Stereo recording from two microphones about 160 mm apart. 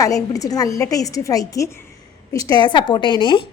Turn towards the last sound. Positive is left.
turn(degrees=30)  # may be behind; listen again after turning